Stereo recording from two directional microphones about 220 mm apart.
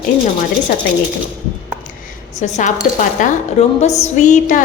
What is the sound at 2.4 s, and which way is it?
A woman's voice, 35° left (ahead or behind).